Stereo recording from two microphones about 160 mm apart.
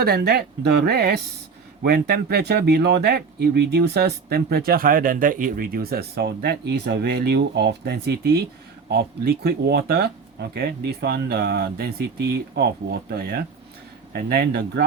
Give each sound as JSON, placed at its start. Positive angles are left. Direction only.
{"t": 0.0, "sound": "speech", "side_deg": -75}